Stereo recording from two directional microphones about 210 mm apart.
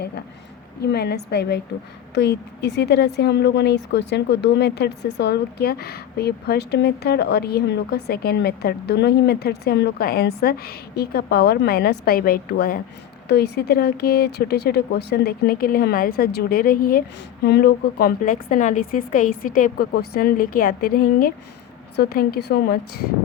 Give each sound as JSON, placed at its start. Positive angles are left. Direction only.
{"t": 0.8, "sound": "speech", "side_deg": 50}